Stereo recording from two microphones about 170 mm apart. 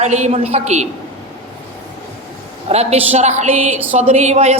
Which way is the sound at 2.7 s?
40° right (ahead or behind).